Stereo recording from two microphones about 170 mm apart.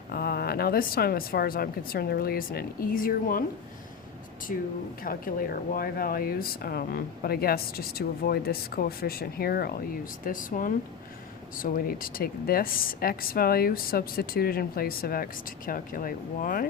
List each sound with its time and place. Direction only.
0.1 s speech: 65° left (ahead or behind)
4.5 s speech: 55° left (ahead or behind)